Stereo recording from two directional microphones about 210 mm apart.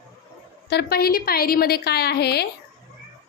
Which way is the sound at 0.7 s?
50° left (ahead or behind).